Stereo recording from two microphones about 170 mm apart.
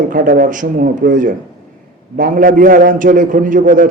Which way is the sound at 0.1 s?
55° right (ahead or behind).